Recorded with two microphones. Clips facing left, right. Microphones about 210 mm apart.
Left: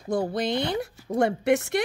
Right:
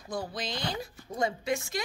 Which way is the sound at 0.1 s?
60° left (ahead or behind).